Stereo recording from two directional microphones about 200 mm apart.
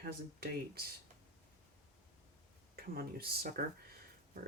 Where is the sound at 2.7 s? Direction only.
50° right (ahead or behind).